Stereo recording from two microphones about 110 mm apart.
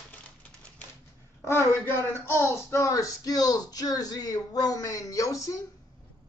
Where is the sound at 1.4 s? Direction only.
20° left (ahead or behind).